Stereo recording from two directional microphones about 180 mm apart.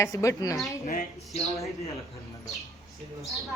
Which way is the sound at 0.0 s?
15° left (ahead or behind).